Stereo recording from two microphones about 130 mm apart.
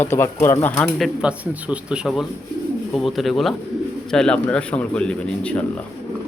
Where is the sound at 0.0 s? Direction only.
15° left (ahead or behind).